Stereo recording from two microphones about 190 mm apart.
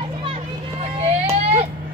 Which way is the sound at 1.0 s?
35° right (ahead or behind).